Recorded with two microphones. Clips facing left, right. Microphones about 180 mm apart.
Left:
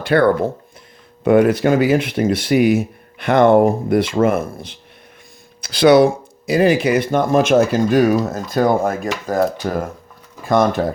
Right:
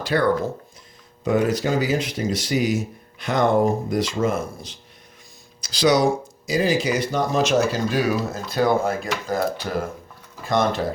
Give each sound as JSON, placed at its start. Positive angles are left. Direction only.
{"t": 0.0, "sound": "speech", "side_deg": 60}